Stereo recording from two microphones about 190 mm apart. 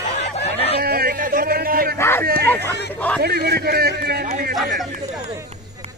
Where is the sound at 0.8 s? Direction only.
55° right (ahead or behind).